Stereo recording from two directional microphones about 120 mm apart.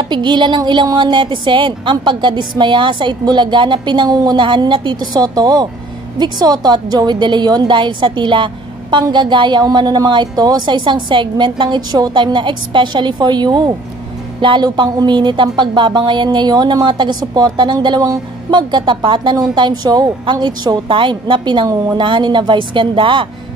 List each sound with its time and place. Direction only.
0.1 s a woman's voice: 40° right (ahead or behind)